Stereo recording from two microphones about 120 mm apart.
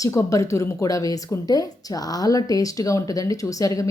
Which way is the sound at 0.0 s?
25° left (ahead or behind).